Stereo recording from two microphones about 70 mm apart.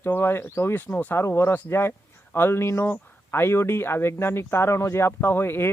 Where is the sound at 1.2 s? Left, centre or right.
Left.